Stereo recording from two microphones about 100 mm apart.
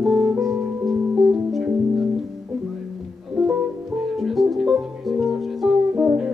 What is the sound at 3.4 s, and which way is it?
Music, centre (ahead or behind).